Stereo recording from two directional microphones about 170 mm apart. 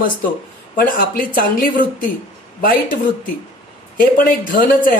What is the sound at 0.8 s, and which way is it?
Speech, 55° left (ahead or behind).